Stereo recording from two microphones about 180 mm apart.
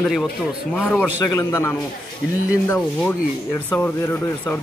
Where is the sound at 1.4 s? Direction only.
15° left (ahead or behind).